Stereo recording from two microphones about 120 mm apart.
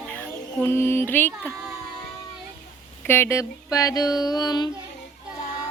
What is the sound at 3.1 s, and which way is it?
Child singing, 20° left (ahead or behind).